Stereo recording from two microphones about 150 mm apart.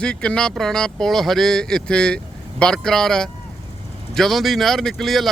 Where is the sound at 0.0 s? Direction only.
5° left (ahead or behind).